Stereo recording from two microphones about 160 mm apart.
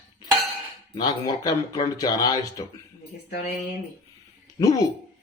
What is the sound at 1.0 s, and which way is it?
Snicker, 25° left (ahead or behind).